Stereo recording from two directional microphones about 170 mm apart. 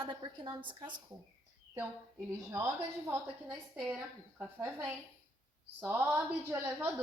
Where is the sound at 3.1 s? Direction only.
10° right (ahead or behind).